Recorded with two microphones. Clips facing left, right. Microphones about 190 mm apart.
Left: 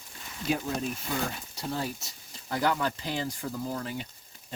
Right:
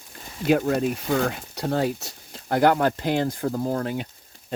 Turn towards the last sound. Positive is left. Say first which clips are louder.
# right 8 dB
turn(degrees=-55)  # may be behind; listen again after turning